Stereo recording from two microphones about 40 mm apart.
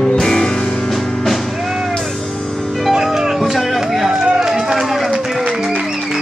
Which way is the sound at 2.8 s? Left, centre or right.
Centre.